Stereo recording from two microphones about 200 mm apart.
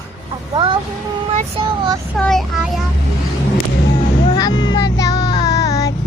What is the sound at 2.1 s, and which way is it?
Speech, centre (ahead or behind).